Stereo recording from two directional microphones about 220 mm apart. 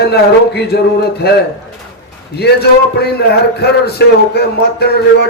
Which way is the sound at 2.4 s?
45° left (ahead or behind).